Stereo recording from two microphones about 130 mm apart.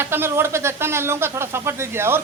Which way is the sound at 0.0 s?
15° right (ahead or behind).